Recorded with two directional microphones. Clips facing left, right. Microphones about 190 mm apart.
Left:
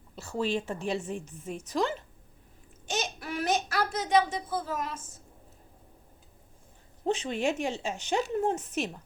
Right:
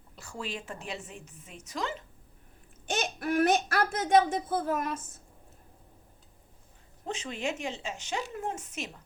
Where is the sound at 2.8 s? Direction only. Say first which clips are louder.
Right 3 dB; 55° right (ahead or behind).